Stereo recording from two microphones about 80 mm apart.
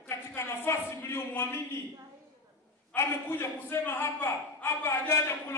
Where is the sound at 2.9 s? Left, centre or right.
Left.